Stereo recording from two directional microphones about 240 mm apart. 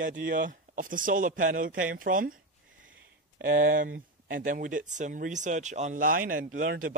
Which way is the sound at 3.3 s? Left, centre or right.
Right.